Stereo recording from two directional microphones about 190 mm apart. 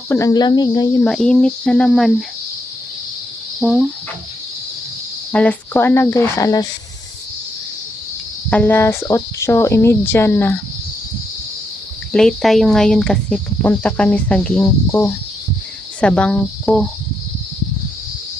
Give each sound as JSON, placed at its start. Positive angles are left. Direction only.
{"t": 0.1, "sound": "speech", "side_deg": 20}
{"t": 1.0, "sound": "speech", "side_deg": 5}
{"t": 3.6, "sound": "speech", "side_deg": 0}
{"t": 5.3, "sound": "speech", "side_deg": 5}
{"t": 8.4, "sound": "speech", "side_deg": 10}
{"t": 12.1, "sound": "speech", "side_deg": 0}